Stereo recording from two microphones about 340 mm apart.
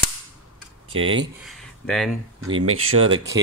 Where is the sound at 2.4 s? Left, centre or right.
Right.